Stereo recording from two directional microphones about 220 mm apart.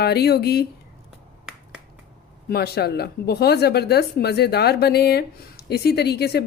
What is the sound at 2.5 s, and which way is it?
Speech, 45° left (ahead or behind).